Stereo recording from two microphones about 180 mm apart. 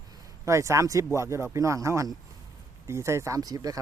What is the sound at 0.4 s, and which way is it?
Speech, 15° right (ahead or behind).